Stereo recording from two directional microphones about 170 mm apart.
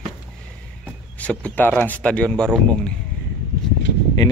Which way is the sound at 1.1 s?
5° left (ahead or behind).